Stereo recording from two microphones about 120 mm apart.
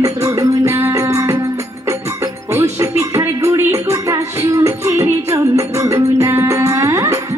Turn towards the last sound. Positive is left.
turn(degrees=-25)  # may be behind; listen again after turning